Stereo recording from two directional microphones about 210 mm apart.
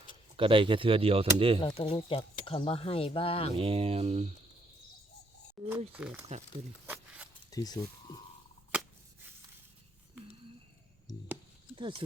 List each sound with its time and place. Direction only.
0.3 s speech: 25° right (ahead or behind)
1.6 s speech: 25° left (ahead or behind)
3.6 s speech: 25° right (ahead or behind)
5.6 s speech: centre (ahead or behind)
6.8 s a sound: 5° right (ahead or behind)
7.5 s speech: 15° left (ahead or behind)
11.7 s speech: 25° right (ahead or behind)